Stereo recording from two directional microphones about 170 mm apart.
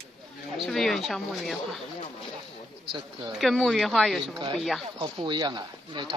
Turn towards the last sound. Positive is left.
turn(degrees=-25)  # may be behind; listen again after turning